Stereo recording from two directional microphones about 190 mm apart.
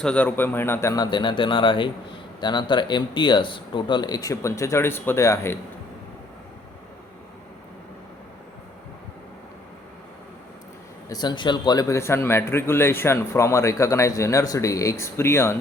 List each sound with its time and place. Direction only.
0.0 s speech: 5° left (ahead or behind)
11.1 s speech: 20° left (ahead or behind)